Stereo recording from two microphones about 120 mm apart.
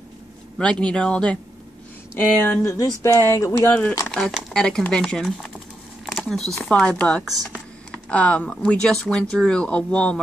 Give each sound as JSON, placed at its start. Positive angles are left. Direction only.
{"t": 0.6, "sound": "speech", "side_deg": 10}
{"t": 2.4, "sound": "speech", "side_deg": 20}
{"t": 4.1, "sound": "speech", "side_deg": 0}
{"t": 6.0, "sound": "a sound", "side_deg": 5}
{"t": 6.6, "sound": "speech", "side_deg": 10}